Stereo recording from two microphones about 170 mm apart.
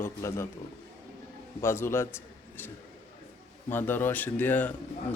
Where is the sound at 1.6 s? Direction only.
15° left (ahead or behind).